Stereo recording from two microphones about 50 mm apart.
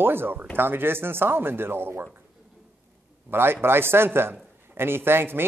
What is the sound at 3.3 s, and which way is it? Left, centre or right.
Speech, right.